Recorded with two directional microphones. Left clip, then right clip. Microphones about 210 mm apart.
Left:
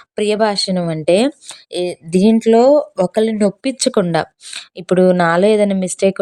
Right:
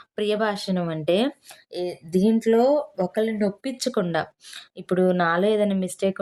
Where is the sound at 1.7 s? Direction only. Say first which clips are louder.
Left 8 dB; 35° left (ahead or behind).